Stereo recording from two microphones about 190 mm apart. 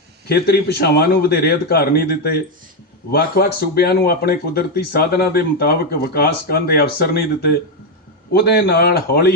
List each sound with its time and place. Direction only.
0.3 s speech: 55° left (ahead or behind)
8.3 s speech: 55° left (ahead or behind)